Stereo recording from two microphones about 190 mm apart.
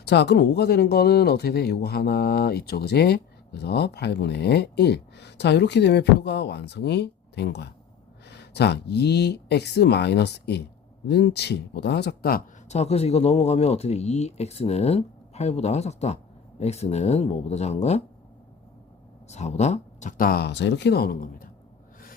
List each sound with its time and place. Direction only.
0.0 s speech: 65° left (ahead or behind)
12.6 s speech: 35° left (ahead or behind)
19.3 s speech: 35° left (ahead or behind)